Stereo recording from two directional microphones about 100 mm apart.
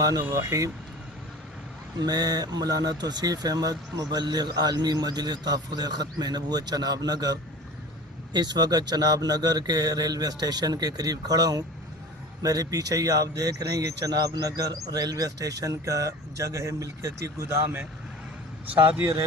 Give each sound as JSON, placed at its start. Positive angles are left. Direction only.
{"t": 0.0, "sound": "speech", "side_deg": -35}
{"t": 2.0, "sound": "speech", "side_deg": -45}